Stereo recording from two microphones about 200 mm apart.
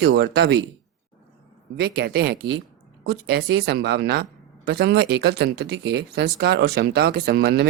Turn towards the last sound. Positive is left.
turn(degrees=-50)  # may be behind; listen again after turning